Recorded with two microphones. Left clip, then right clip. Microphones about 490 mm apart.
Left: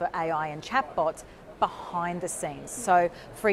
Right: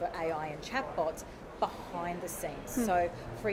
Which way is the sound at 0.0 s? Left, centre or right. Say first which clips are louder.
Left 6 dB; left.